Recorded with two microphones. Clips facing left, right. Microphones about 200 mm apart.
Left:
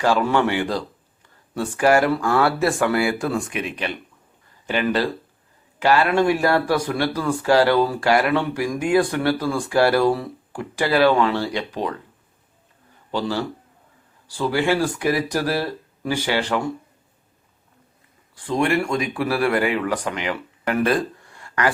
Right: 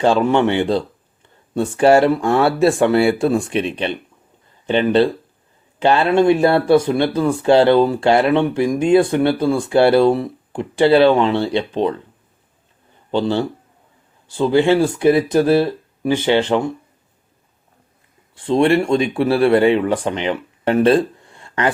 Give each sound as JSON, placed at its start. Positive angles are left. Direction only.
{"t": 0.0, "sound": "speech", "side_deg": -25}
{"t": 13.1, "sound": "speech", "side_deg": -25}
{"t": 18.3, "sound": "speech", "side_deg": -25}